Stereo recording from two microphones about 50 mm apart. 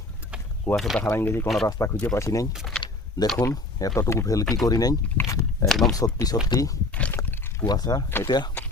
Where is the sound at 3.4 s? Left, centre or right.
Left.